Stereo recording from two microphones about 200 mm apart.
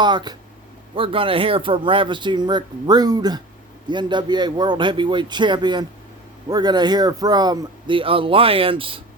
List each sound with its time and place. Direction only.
0.0 s speech: 20° right (ahead or behind)